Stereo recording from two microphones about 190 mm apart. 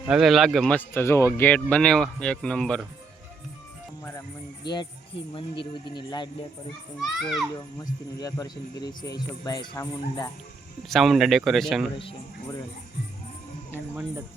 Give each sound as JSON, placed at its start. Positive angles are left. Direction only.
{"t": 0.0, "sound": "speech", "side_deg": 0}
{"t": 4.7, "sound": "speech", "side_deg": 25}
{"t": 7.0, "sound": "speech", "side_deg": 0}
{"t": 8.2, "sound": "speech", "side_deg": 20}
{"t": 10.8, "sound": "speech", "side_deg": 0}